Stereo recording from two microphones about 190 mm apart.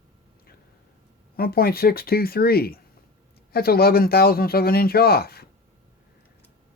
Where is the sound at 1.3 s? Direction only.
50° left (ahead or behind).